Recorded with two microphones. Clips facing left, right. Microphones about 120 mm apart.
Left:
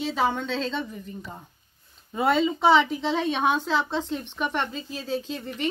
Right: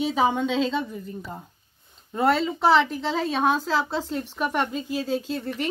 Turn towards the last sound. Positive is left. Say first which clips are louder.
# right 3 dB
turn(degrees=-5)  # may be behind; listen again after turning